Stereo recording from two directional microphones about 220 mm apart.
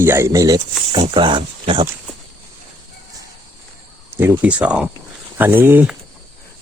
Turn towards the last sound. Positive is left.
turn(degrees=-5)  # may be behind; listen again after turning